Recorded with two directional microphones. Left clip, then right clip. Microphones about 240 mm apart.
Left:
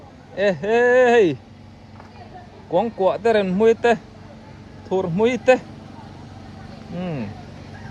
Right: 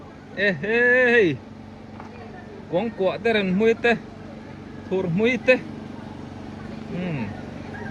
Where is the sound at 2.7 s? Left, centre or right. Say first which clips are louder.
Left 4 dB; centre.